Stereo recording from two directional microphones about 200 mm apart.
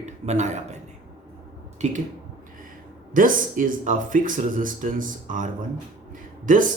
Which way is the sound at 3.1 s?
45° right (ahead or behind).